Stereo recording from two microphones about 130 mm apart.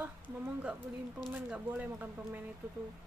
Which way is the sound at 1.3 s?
15° right (ahead or behind).